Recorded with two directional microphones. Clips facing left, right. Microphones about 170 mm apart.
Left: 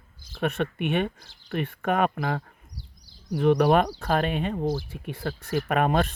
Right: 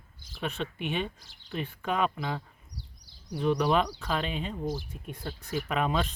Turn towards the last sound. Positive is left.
turn(degrees=55)  # may be behind; listen again after turning